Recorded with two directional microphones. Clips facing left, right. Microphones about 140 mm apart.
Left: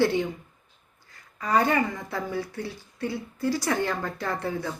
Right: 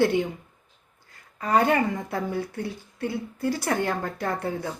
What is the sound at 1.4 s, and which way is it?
A woman's voice, 50° right (ahead or behind).